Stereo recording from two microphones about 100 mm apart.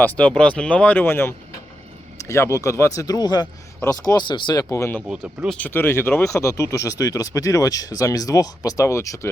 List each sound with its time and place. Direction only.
0.0 s speech: 15° left (ahead or behind); by 4.6 s 50° left (ahead or behind)
4.7 s speech: 30° left (ahead or behind)